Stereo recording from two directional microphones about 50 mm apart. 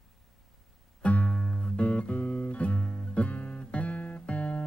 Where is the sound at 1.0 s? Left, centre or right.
Left.